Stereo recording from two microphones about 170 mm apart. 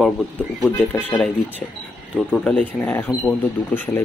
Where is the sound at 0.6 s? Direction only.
10° left (ahead or behind).